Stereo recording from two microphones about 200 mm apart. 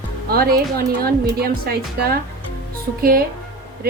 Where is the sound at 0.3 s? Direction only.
50° right (ahead or behind).